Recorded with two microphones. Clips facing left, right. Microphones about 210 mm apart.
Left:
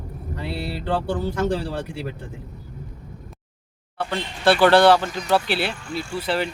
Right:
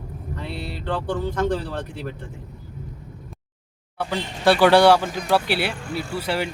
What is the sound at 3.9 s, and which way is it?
Speech, 10° right (ahead or behind).